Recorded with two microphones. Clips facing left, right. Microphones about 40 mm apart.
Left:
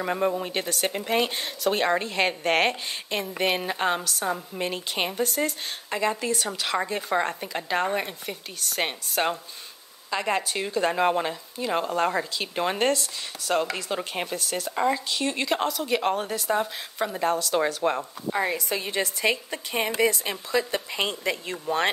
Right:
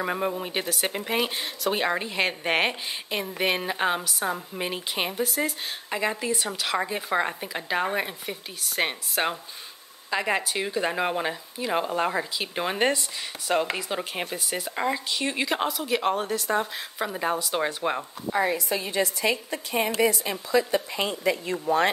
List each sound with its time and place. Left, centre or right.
0.0 s a woman's voice: centre
18.5 s a woman's voice: left